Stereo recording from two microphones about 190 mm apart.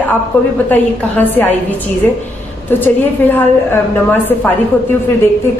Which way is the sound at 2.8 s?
10° left (ahead or behind).